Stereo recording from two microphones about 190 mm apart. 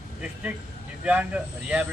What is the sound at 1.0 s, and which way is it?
Speech, 5° right (ahead or behind).